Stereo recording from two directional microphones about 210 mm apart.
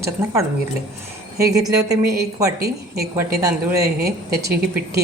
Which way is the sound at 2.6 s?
50° right (ahead or behind).